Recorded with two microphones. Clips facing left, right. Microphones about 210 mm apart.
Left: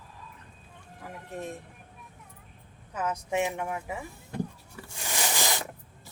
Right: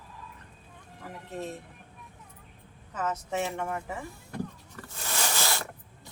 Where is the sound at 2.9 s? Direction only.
10° left (ahead or behind).